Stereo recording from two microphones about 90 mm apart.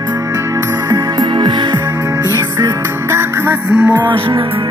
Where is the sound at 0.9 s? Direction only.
55° right (ahead or behind).